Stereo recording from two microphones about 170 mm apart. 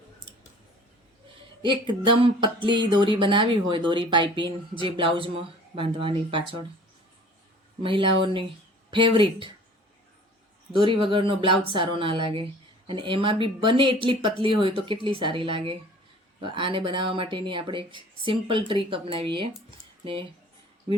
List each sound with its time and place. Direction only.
1.6 s music: 30° right (ahead or behind)
7.8 s music: 30° right (ahead or behind)
10.7 s speech: 30° right (ahead or behind)
16.4 s music: 30° right (ahead or behind)